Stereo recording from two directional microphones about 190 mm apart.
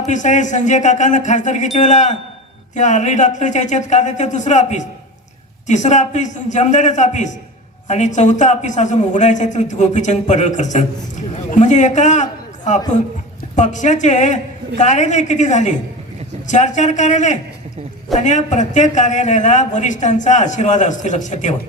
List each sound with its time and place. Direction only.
0.0 s a man's voice: 40° left (ahead or behind)